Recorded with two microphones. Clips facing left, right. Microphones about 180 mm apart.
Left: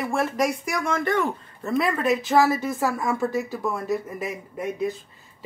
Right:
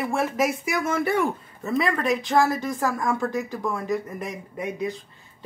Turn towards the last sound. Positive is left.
turn(degrees=5)  # may be behind; listen again after turning